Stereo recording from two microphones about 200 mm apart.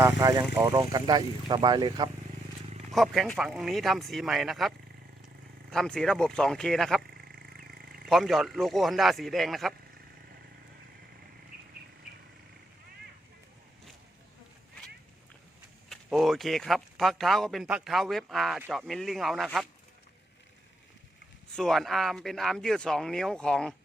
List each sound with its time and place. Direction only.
0.0 s speech: 15° right (ahead or behind)
2.9 s speech: centre (ahead or behind)
5.7 s speech: 5° left (ahead or behind)
7.5 s a sound: 50° right (ahead or behind)
8.0 s speech: centre (ahead or behind)
15.9 s speech: centre (ahead or behind)
21.5 s speech: centre (ahead or behind)